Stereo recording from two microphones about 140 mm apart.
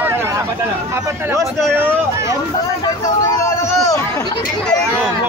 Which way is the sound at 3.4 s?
20° left (ahead or behind).